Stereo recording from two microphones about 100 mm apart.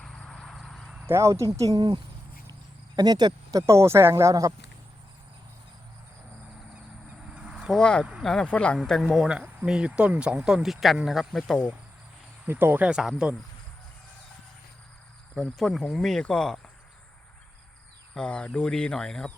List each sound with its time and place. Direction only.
0.0 s cricket: 5° left (ahead or behind)
1.0 s speech: 30° right (ahead or behind); by 2.0 s 45° right (ahead or behind)
2.5 s cricket: 45° right (ahead or behind)
3.7 s speech: 30° right (ahead or behind)
7.3 s cricket: 10° right (ahead or behind)
7.8 s speech: 10° left (ahead or behind)
8.9 s speech: 5° right (ahead or behind)
12.5 s speech: 20° right (ahead or behind)
12.9 s speech: 5° right (ahead or behind)
15.4 s speech: centre (ahead or behind)
18.1 s speech: 10° left (ahead or behind)